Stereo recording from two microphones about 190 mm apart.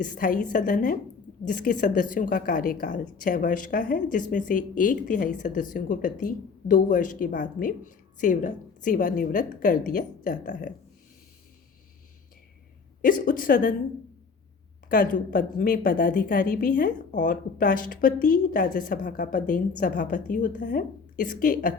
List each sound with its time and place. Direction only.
0.0 s speech: 45° left (ahead or behind)
13.0 s speech: 45° left (ahead or behind)
14.8 s speech: 45° left (ahead or behind)